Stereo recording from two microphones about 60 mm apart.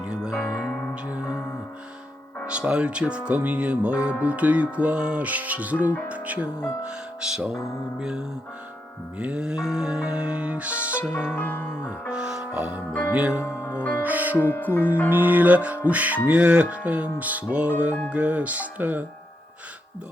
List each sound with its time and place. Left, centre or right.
0.0 s music: centre
0.6 s music: left
2.5 s music: centre
6.8 s speech: centre
9.1 s music: centre
11.3 s music: left
12.1 s music: centre
12.5 s speech: centre
13.1 s music: centre
13.4 s speech: left
14.0 s speech: right
14.5 s music: left
15.1 s music: right